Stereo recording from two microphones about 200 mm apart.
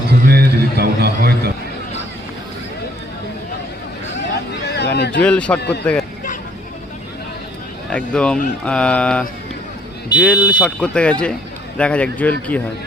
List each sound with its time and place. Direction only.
0.3 s a sound: 50° right (ahead or behind)
4.4 s a sound: 55° left (ahead or behind)
5.2 s speech: 5° left (ahead or behind)
5.5 s speech: 55° left (ahead or behind)
5.8 s speech: 5° left (ahead or behind)
7.9 s speech: 5° left (ahead or behind)
10.2 s a man's voice: 5° left (ahead or behind)